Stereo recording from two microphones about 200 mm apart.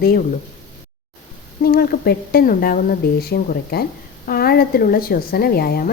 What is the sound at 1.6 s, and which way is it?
Speech, 50° left (ahead or behind).